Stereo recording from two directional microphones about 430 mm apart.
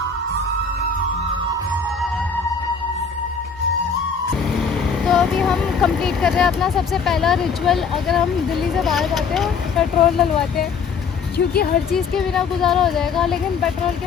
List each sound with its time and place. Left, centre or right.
5.0 s speech: centre
11.3 s speech: left
11.9 s speech: centre